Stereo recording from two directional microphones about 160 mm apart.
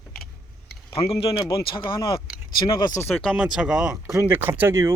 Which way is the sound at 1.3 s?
30° left (ahead or behind).